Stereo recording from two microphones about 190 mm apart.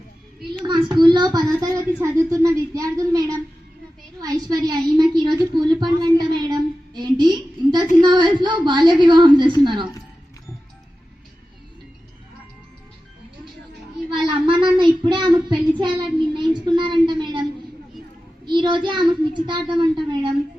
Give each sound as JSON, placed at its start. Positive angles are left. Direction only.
{"t": 0.6, "sound": "a woman's voice", "side_deg": -25}
{"t": 14.1, "sound": "child singing", "side_deg": -25}
{"t": 16.6, "sound": "a sound", "side_deg": -25}
{"t": 18.4, "sound": "child singing", "side_deg": -25}